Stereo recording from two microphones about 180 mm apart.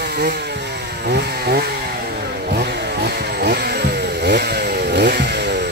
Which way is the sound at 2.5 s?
60° right (ahead or behind).